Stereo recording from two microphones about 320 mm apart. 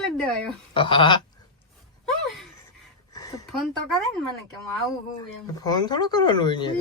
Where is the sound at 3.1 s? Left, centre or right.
Centre.